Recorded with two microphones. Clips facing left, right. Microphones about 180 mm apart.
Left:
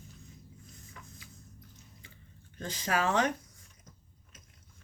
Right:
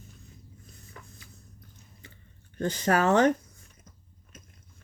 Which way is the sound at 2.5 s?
60° right (ahead or behind).